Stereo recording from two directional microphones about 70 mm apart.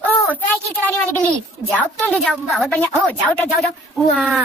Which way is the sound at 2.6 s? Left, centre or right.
Left.